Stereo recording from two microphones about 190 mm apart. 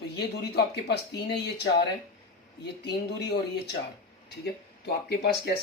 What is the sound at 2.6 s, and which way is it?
Speech, 60° left (ahead or behind).